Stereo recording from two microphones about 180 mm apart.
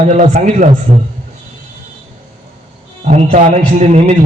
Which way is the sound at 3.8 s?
40° right (ahead or behind).